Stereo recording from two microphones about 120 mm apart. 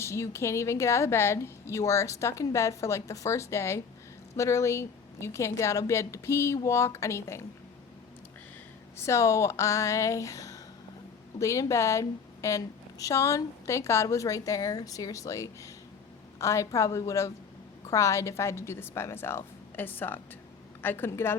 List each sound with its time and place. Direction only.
0.0 s a woman's voice: 25° left (ahead or behind)
9.0 s a woman's voice: 25° left (ahead or behind)